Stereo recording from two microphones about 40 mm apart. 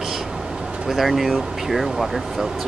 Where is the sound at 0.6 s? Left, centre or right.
Right.